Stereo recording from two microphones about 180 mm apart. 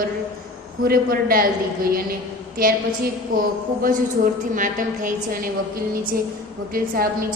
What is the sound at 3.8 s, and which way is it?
A woman's voice, 50° right (ahead or behind).